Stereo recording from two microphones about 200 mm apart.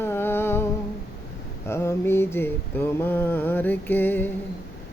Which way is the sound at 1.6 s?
15° left (ahead or behind).